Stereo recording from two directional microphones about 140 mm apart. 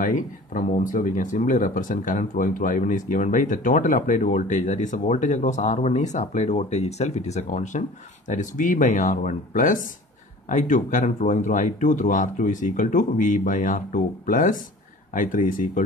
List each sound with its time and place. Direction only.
0.0 s speech: 70° left (ahead or behind)